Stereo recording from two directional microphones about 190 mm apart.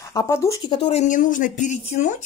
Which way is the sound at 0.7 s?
30° left (ahead or behind).